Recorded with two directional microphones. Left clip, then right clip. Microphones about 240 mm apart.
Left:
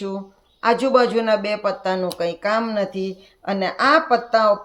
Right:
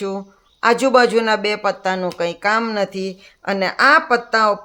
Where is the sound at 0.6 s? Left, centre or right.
Right.